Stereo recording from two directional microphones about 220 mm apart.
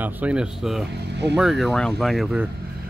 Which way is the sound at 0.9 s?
50° right (ahead or behind).